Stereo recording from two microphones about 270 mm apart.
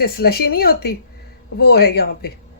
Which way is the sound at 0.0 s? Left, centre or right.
Left.